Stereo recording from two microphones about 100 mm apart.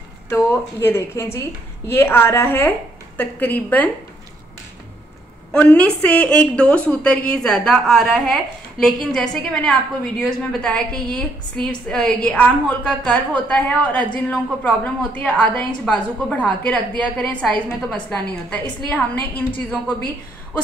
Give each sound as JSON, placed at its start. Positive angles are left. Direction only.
{"t": 0.3, "sound": "a woman's voice", "side_deg": 25}
{"t": 5.5, "sound": "a woman's voice", "side_deg": 15}